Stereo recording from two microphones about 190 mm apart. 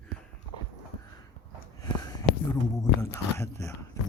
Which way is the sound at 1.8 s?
20° left (ahead or behind).